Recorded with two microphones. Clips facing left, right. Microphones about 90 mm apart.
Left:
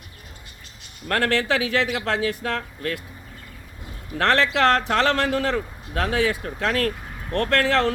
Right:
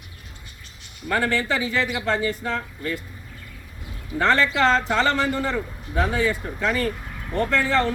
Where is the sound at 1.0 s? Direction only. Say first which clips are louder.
Left 1 dB; 80° left.